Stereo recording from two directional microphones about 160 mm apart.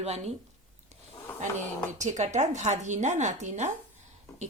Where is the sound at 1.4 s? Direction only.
50° right (ahead or behind).